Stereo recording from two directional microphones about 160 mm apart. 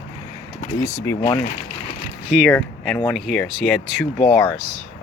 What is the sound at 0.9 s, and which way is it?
Speech, 15° left (ahead or behind).